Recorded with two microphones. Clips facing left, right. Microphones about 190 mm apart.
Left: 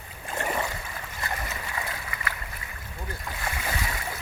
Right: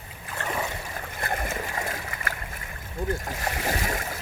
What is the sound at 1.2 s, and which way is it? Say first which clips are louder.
Boat: right 5 dB; 50° right (ahead or behind).